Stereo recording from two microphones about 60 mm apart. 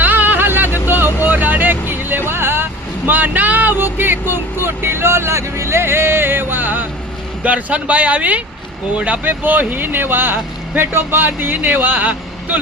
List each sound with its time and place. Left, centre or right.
0.0 s vehicle: right
3.1 s speech: right